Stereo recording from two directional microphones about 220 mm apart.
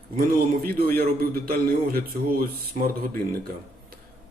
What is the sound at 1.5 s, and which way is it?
Speech, 45° right (ahead or behind).